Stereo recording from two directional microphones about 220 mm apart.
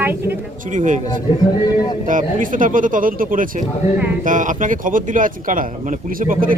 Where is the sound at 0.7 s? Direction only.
35° right (ahead or behind).